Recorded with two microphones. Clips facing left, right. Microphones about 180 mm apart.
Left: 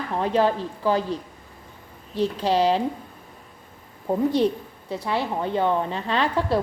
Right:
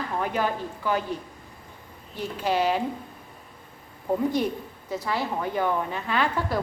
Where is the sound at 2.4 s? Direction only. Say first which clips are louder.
Left 2 dB; 35° left (ahead or behind).